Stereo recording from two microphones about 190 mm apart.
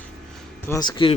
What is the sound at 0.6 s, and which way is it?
Speech, 20° left (ahead or behind).